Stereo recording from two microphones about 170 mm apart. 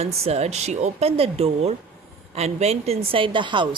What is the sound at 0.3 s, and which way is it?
A woman's voice, 40° right (ahead or behind).